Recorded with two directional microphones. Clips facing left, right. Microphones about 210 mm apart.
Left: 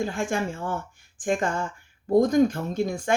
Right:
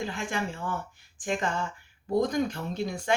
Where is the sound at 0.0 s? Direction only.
45° left (ahead or behind).